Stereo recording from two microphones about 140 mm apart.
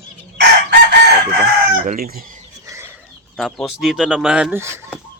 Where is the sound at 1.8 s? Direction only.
90° right.